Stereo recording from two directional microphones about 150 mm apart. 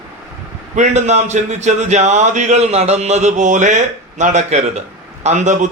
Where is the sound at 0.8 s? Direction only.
50° right (ahead or behind).